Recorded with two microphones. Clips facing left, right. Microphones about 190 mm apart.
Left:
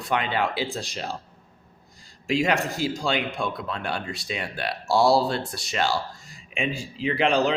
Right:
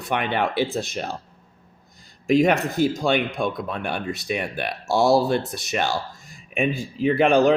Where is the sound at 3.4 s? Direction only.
15° right (ahead or behind).